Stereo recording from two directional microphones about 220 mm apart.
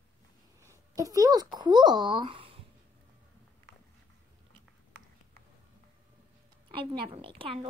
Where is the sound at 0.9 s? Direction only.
15° right (ahead or behind).